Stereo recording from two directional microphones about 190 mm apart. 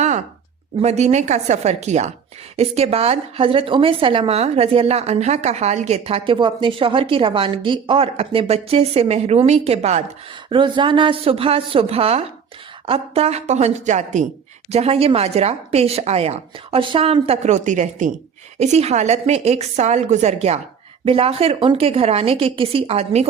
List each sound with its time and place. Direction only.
0.8 s a woman's voice: 35° right (ahead or behind)